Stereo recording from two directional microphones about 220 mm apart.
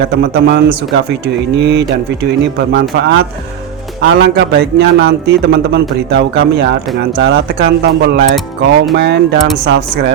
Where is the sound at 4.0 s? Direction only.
50° right (ahead or behind).